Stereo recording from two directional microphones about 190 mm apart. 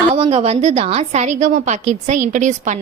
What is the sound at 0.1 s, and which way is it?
A woman's voice, 30° right (ahead or behind).